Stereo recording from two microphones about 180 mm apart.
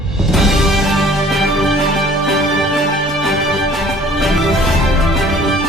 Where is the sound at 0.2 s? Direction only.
Centre (ahead or behind).